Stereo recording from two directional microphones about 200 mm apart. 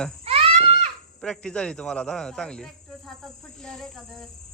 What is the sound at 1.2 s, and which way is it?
Speech, 5° left (ahead or behind).